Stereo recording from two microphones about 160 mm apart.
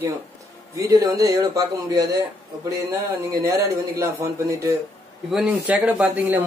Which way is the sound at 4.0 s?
20° right (ahead or behind).